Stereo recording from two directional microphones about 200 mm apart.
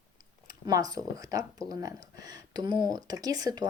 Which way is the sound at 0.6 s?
20° right (ahead or behind).